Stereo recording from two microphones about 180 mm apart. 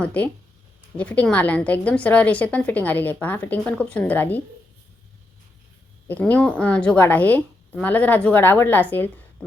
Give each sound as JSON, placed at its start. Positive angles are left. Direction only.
{"t": 0.0, "sound": "a woman's voice", "side_deg": 10}
{"t": 6.1, "sound": "a woman's voice", "side_deg": 10}